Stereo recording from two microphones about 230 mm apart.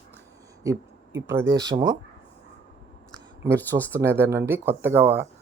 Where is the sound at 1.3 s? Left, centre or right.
Centre.